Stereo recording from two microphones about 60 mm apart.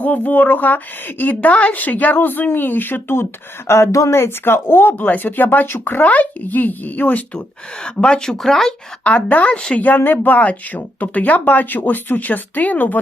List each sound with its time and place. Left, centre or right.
0.0 s a woman's voice: left
3.7 s speech: left
4.1 s a woman's voice: left
7.3 s speech: centre
9.0 s a woman's voice: left